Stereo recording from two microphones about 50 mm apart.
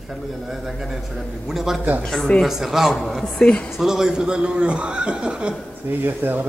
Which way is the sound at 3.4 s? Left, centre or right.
Centre.